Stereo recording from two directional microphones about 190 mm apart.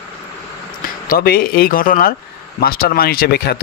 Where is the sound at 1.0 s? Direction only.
50° left (ahead or behind).